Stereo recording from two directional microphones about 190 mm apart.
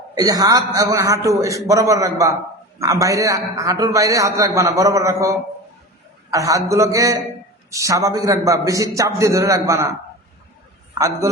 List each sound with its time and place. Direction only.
0.2 s a man's voice: 20° right (ahead or behind)
10.9 s a man's voice: 15° right (ahead or behind)